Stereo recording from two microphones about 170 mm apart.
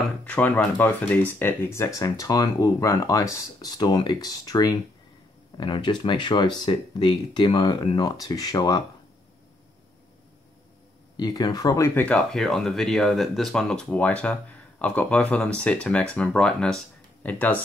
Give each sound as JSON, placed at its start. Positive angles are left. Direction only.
{"t": 0.2, "sound": "speech", "side_deg": 10}
{"t": 11.1, "sound": "speech", "side_deg": 25}